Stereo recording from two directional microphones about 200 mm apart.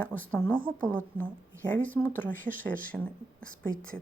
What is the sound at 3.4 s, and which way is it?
Speech, 45° right (ahead or behind).